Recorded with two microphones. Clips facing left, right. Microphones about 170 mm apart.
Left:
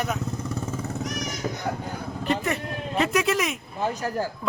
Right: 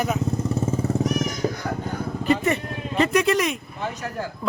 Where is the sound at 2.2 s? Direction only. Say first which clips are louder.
Right 4 dB; centre (ahead or behind).